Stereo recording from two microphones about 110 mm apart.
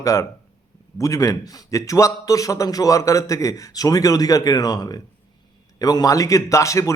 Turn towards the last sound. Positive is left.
turn(degrees=30)  # may be behind; listen again after turning